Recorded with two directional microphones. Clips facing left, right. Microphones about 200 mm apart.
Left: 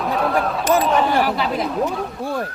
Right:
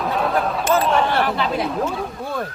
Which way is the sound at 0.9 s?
Centre (ahead or behind).